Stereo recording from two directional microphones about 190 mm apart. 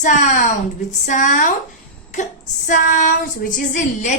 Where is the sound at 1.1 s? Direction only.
40° left (ahead or behind).